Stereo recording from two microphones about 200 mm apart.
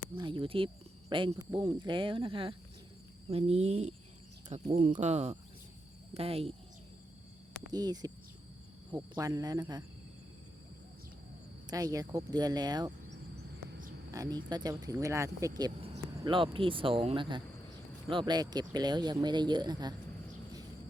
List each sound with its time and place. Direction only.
0.2 s speech: 25° right (ahead or behind)
7.7 s speech: 20° right (ahead or behind)
11.7 s speech: 15° right (ahead or behind)
14.1 s speech: 15° right (ahead or behind)